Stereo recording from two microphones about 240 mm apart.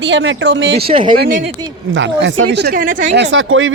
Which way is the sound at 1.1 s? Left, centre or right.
Right.